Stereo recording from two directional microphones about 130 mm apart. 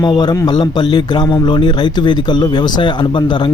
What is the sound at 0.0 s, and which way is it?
A man's voice, 35° left (ahead or behind).